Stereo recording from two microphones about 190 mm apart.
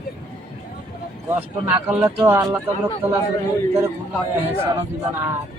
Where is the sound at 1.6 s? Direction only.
15° right (ahead or behind).